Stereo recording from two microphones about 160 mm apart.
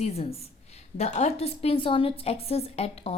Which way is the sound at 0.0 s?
40° left (ahead or behind).